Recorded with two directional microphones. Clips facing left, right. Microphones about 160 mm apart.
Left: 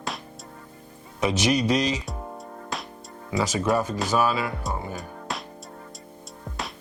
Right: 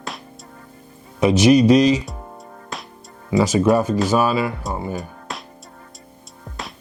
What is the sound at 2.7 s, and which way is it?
Music, centre (ahead or behind).